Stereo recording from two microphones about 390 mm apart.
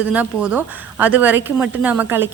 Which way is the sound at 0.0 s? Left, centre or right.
Centre.